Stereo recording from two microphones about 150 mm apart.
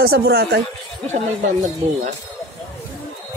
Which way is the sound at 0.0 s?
90° right.